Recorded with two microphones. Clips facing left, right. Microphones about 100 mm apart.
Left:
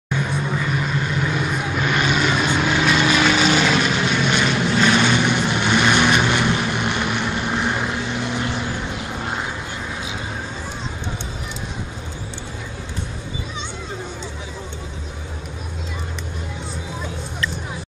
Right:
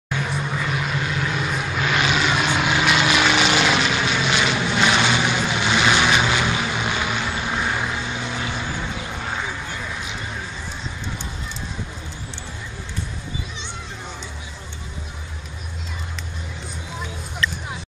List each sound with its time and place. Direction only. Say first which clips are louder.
0.1 s vehicle: left 2 dB; centre (ahead or behind)